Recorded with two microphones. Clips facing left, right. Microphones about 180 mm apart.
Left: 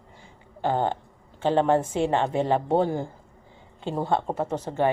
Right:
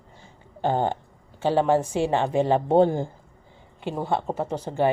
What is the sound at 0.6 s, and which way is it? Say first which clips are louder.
Speech: right 1 dB; 15° right (ahead or behind).